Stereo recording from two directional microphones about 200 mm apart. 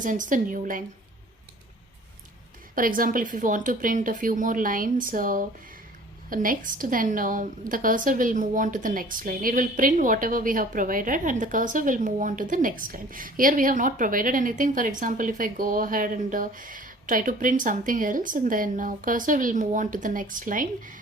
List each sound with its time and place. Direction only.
0.0 s speech: 40° right (ahead or behind)
2.7 s a woman's voice: 45° right (ahead or behind)